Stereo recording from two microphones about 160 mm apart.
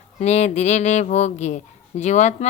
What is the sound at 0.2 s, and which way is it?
Speech, 45° left (ahead or behind).